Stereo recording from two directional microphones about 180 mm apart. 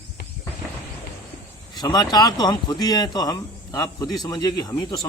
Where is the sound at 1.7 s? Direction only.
20° left (ahead or behind).